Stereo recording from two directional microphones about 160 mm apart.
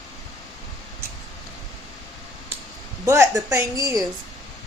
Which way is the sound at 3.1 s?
15° right (ahead or behind).